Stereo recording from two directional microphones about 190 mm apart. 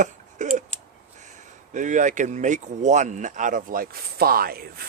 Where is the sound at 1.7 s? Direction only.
40° right (ahead or behind).